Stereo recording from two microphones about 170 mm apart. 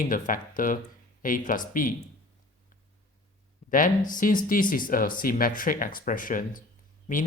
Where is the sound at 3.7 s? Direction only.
50° left (ahead or behind).